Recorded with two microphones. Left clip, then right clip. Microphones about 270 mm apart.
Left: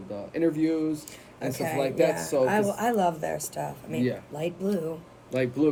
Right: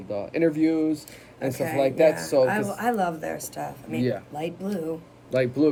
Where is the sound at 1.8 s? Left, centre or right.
Centre.